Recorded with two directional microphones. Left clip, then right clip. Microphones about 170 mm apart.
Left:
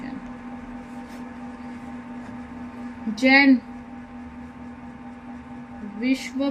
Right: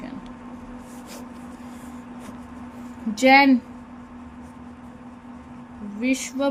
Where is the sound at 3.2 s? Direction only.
35° right (ahead or behind).